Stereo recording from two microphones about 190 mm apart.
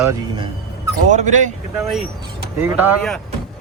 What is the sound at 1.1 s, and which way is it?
Speech, 40° right (ahead or behind).